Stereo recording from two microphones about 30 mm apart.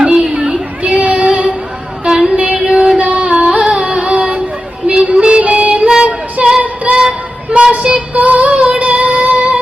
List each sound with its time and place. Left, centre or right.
0.0 s a sound: right
0.8 s child singing: right
2.0 s a sound: centre
2.6 s music: right
3.2 s music: right
5.4 s music: right
6.1 s female singing: right
6.9 s music: right
7.8 s child singing: right
8.4 s music: right
8.8 s music: right